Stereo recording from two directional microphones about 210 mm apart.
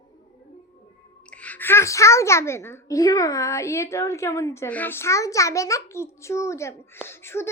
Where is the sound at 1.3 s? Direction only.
5° left (ahead or behind).